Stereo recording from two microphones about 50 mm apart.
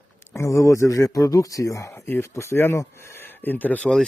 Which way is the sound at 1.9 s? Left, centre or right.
Left.